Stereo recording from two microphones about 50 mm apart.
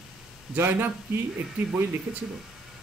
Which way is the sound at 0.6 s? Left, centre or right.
Right.